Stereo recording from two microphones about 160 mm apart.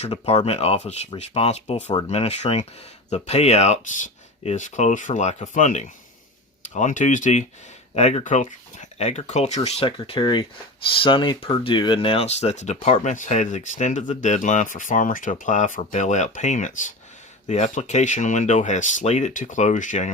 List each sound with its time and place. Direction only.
0.0 s speech: 40° left (ahead or behind)